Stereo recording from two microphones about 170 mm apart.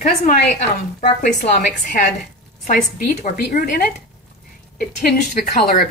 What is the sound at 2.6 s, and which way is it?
A woman's voice, 60° left (ahead or behind).